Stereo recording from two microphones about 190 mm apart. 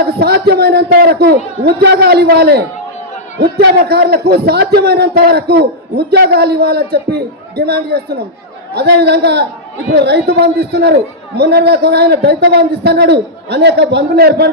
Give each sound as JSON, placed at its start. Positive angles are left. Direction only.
{"t": 0.0, "sound": "a man's voice", "side_deg": -55}